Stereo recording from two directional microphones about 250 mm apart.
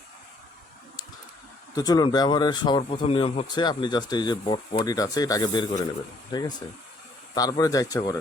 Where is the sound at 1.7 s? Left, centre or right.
Centre.